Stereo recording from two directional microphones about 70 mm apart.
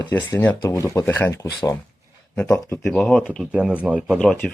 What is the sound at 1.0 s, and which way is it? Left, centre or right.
Speech, left.